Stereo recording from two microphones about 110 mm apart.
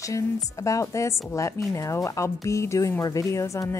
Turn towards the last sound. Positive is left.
turn(degrees=25)  # may be behind; listen again after turning